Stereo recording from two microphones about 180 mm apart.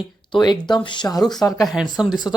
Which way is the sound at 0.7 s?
25° left (ahead or behind).